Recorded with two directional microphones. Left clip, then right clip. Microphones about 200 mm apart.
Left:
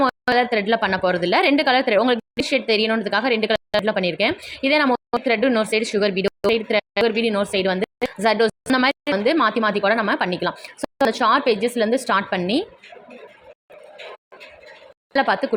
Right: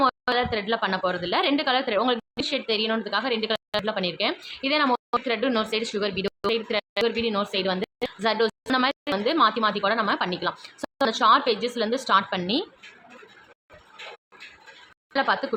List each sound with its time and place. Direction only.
0.0 s speech: 25° left (ahead or behind)
15.1 s speech: 25° left (ahead or behind)